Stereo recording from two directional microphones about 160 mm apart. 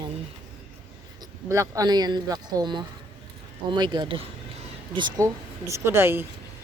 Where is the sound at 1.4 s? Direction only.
20° right (ahead or behind).